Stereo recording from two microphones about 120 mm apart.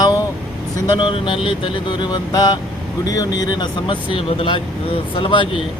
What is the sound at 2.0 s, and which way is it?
Speech, 35° left (ahead or behind).